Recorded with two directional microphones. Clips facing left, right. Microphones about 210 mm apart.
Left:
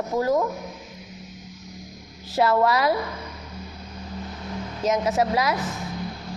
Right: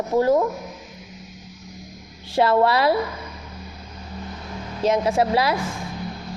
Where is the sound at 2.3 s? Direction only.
30° right (ahead or behind).